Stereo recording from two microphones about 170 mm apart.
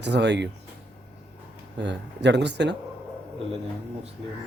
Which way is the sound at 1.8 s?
90° right.